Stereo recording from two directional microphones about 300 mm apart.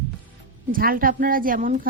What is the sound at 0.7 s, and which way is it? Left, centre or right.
Speech, right.